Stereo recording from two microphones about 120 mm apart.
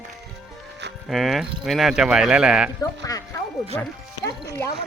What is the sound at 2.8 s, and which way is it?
Speech, 30° left (ahead or behind).